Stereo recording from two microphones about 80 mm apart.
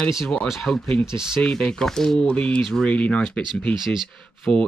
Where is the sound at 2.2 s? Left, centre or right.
Centre.